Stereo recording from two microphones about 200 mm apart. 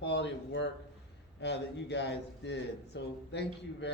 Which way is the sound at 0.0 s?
60° left (ahead or behind).